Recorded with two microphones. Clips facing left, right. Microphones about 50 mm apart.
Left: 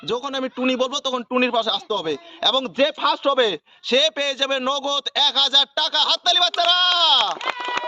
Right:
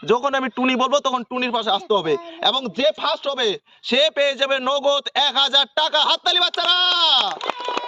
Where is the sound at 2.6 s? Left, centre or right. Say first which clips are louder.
Left 1 dB; centre.